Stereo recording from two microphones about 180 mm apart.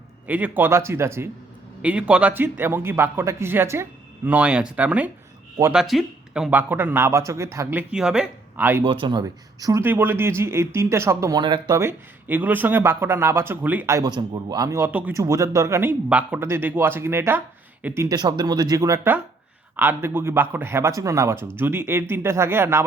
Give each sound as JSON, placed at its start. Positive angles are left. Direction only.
{"t": 0.3, "sound": "speech", "side_deg": -10}
{"t": 8.8, "sound": "speech", "side_deg": -30}